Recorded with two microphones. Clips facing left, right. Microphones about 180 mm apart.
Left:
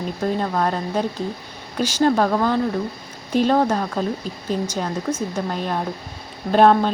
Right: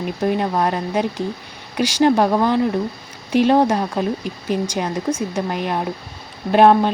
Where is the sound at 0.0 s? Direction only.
15° right (ahead or behind).